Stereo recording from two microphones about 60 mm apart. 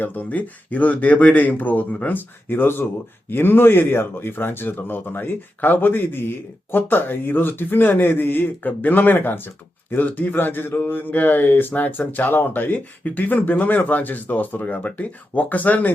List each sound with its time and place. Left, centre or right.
0.0 s speech: left